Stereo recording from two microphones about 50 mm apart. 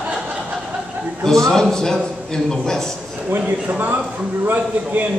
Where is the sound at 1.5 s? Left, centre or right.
Centre.